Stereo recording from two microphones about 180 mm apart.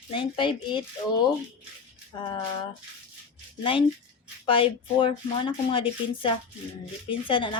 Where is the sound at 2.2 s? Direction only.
25° left (ahead or behind).